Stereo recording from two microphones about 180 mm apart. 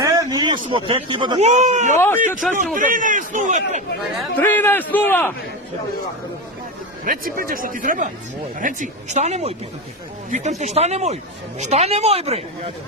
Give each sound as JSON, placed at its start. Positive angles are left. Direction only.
{"t": 0.0, "sound": "a sound", "side_deg": -20}
{"t": 0.7, "sound": "speech", "side_deg": -30}
{"t": 1.4, "sound": "speech", "side_deg": -40}
{"t": 2.0, "sound": "a man's voice", "side_deg": 10}
{"t": 2.4, "sound": "a man's voice", "side_deg": 0}
{"t": 2.7, "sound": "a man's voice", "side_deg": -45}
{"t": 4.4, "sound": "a man's voice", "side_deg": 10}
{"t": 7.0, "sound": "a man's voice", "side_deg": -50}